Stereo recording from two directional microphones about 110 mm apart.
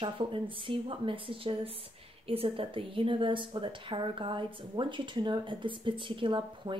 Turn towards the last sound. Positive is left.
turn(degrees=-45)  # may be behind; listen again after turning